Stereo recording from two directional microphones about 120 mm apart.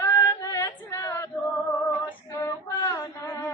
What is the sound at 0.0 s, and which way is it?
Female singing, 25° left (ahead or behind).